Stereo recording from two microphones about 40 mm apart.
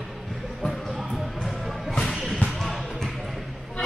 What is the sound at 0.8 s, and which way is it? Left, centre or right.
Music, centre.